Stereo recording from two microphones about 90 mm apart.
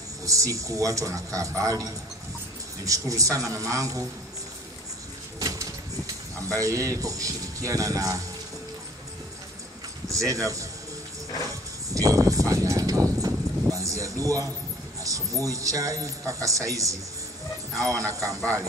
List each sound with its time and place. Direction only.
0.2 s speech: 35° right (ahead or behind)
6.3 s speech: 35° right (ahead or behind)
10.0 s speech: 35° right (ahead or behind)
11.9 s a sound: 40° right (ahead or behind)
15.0 s speech: 40° right (ahead or behind)